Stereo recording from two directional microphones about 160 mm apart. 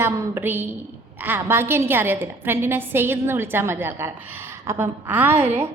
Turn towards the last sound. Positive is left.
turn(degrees=-15)  # may be behind; listen again after turning